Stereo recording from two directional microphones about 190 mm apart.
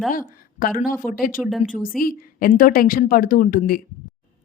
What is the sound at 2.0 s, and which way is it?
A woman's voice, 50° left (ahead or behind).